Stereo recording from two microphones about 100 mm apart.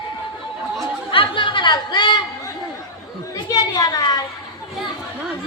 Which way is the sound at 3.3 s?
40° left (ahead or behind).